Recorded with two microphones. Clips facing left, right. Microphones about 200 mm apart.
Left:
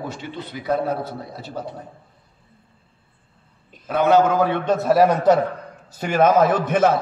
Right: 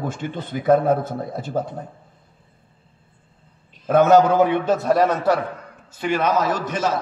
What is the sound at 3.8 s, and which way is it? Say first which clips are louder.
Speech: right 3 dB; 45° right (ahead or behind).